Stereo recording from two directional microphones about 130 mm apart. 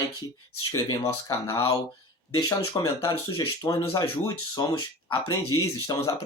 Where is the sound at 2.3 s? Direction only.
30° left (ahead or behind).